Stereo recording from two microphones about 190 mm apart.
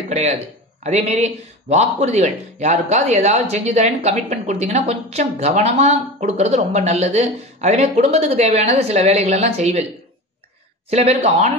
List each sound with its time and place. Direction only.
0.1 s a man's voice: 35° right (ahead or behind)
10.9 s a man's voice: 35° right (ahead or behind)